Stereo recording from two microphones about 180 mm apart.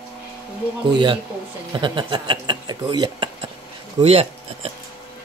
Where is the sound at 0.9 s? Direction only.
25° right (ahead or behind).